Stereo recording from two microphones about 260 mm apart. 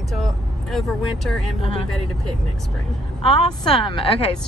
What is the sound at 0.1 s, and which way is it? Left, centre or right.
Speech, centre.